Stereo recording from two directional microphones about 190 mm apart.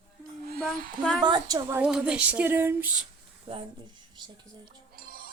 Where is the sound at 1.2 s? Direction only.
20° right (ahead or behind).